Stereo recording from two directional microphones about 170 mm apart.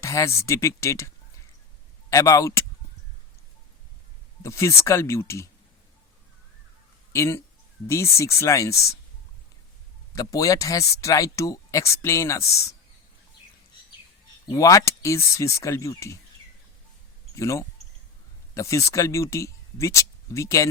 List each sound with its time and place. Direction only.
0.0 s speech: 15° left (ahead or behind)
4.4 s speech: 15° left (ahead or behind)
7.1 s speech: 15° left (ahead or behind)
10.2 s speech: 20° left (ahead or behind)
14.4 s speech: 20° left (ahead or behind)
17.3 s speech: 20° left (ahead or behind)